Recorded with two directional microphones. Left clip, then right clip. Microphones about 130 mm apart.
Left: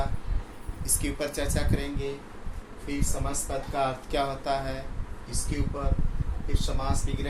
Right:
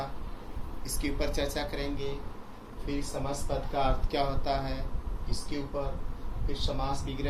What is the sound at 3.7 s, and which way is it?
Speech, 35° left (ahead or behind).